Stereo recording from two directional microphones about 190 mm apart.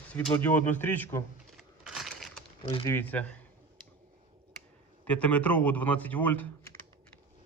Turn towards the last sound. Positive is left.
turn(degrees=10)  # may be behind; listen again after turning